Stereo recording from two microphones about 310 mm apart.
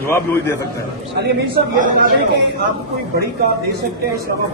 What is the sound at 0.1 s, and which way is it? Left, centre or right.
Speech, centre.